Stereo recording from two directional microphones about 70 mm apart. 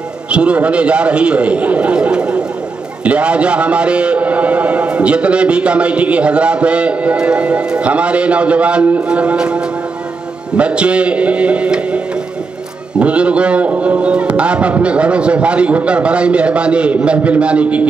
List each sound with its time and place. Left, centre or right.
0.3 s a man's voice: centre
10.6 s a man's voice: centre
13.0 s a man's voice: centre